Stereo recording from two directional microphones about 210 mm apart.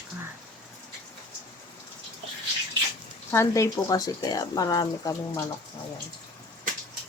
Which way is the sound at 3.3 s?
15° left (ahead or behind).